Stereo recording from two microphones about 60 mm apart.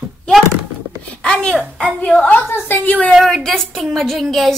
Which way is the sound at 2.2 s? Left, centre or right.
Left.